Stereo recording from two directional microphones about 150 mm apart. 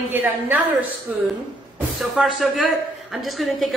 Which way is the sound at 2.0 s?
Centre (ahead or behind).